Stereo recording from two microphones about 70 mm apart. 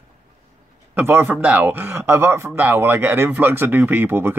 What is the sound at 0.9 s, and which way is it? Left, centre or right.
Speech, right.